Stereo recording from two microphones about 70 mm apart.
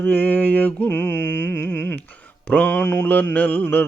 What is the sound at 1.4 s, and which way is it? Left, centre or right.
Humming, left.